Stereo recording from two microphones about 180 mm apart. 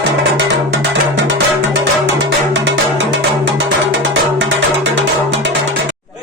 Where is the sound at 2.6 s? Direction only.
75° right (ahead or behind).